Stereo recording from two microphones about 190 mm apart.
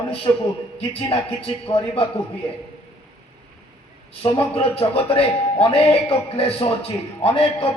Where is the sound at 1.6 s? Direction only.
30° left (ahead or behind).